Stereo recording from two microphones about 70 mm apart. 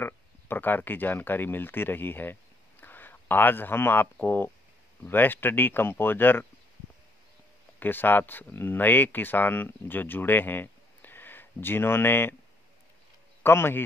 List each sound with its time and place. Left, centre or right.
0.0 s speech: left
7.8 s speech: left
13.4 s speech: left